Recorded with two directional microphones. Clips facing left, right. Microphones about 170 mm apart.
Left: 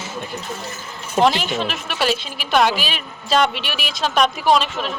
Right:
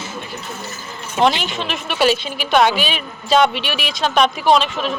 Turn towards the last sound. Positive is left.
turn(degrees=0)  # may be behind; listen again after turning